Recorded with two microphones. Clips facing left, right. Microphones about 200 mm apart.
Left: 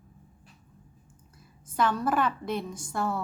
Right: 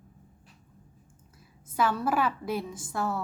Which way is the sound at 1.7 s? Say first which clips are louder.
Left 1 dB; 5° right (ahead or behind).